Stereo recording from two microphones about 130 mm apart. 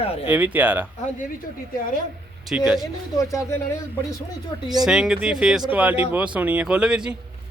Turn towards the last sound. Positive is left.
turn(degrees=-5)  # may be behind; listen again after turning